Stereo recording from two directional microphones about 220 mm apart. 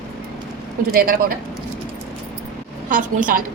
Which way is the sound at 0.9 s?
40° right (ahead or behind).